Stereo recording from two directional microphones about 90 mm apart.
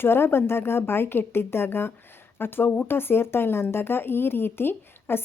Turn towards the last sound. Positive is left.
turn(degrees=25)  # may be behind; listen again after turning